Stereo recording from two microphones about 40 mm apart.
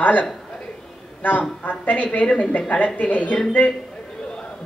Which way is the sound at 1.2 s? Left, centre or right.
Left.